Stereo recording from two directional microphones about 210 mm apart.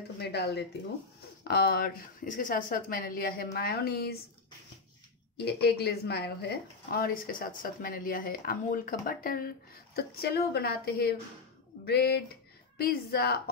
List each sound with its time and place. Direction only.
0.2 s speech: 50° left (ahead or behind)
5.4 s speech: 50° left (ahead or behind)